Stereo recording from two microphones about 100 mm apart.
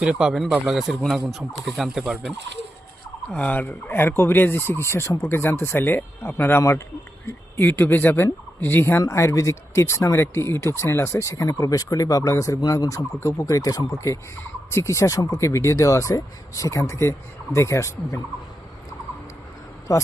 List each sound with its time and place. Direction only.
0.0 s speech: 10° right (ahead or behind)
3.3 s speech: 15° left (ahead or behind)
6.6 s speech: 30° left (ahead or behind)
19.9 s speech: 30° left (ahead or behind)